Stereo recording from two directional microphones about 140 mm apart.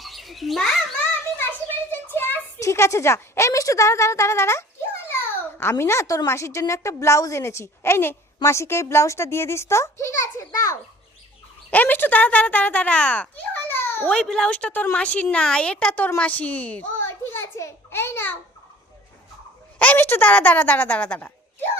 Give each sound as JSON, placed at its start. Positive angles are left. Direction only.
{"t": 0.0, "sound": "bird", "side_deg": 0}
{"t": 1.9, "sound": "a child's voice", "side_deg": 15}
{"t": 10.3, "sound": "a sound", "side_deg": 20}
{"t": 11.7, "sound": "a child's voice", "side_deg": 10}
{"t": 19.8, "sound": "a woman's voice", "side_deg": 15}